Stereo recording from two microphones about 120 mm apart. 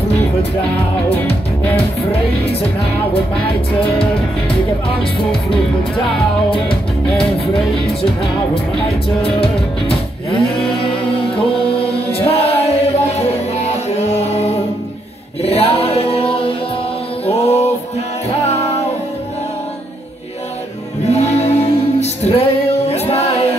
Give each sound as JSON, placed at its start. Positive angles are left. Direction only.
{"t": 9.2, "sound": "music", "side_deg": 50}
{"t": 12.1, "sound": "music", "side_deg": 55}
{"t": 17.3, "sound": "music", "side_deg": 65}
{"t": 21.0, "sound": "music", "side_deg": 65}